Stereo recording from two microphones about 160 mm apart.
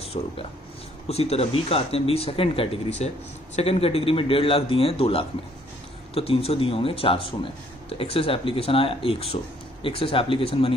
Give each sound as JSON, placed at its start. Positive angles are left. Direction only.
{"t": 0.0, "sound": "speech", "side_deg": 40}